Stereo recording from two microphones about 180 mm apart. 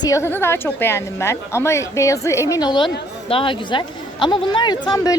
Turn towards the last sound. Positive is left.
turn(degrees=20)  # may be behind; listen again after turning